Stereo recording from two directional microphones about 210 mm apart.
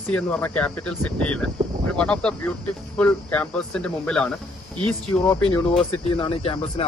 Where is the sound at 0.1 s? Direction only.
5° left (ahead or behind).